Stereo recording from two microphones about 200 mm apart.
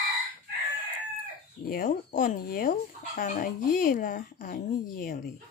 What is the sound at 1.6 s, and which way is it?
Speech, 45° left (ahead or behind).